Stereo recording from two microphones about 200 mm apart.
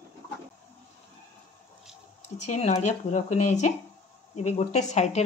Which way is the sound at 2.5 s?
35° left (ahead or behind).